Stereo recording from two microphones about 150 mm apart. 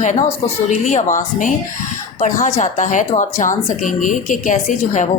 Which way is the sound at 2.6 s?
55° left (ahead or behind).